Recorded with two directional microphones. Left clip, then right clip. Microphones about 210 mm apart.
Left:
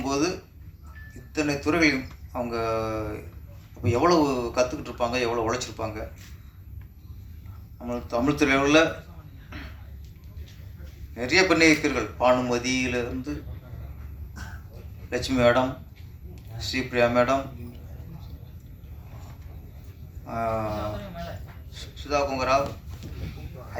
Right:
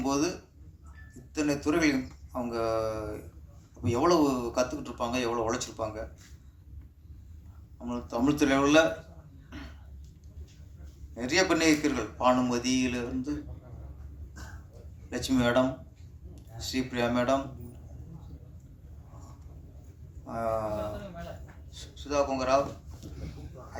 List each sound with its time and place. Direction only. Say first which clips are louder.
0.0 s a sound: left 3 dB; 65° right (ahead or behind)
1.3 s a man's voice: left 3 dB; 65° right (ahead or behind)
7.9 s a man's voice: left 4 dB; 65° right (ahead or behind)
11.1 s a man's voice: left 5 dB; 65° right (ahead or behind)
15.1 s a man's voice: left 6 dB; 65° right (ahead or behind)
20.2 s a man's voice: left 3 dB; 60° right (ahead or behind)
21.7 s speech: left 6 dB; 65° right (ahead or behind)